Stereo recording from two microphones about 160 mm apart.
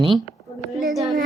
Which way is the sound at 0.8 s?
Centre (ahead or behind).